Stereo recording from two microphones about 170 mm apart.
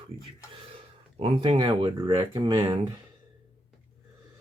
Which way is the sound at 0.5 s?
35° right (ahead or behind).